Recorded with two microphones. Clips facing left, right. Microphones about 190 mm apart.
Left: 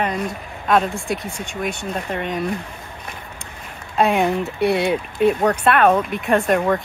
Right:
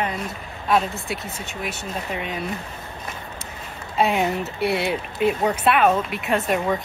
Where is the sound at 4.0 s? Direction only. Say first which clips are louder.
Left 3 dB; 55° left (ahead or behind).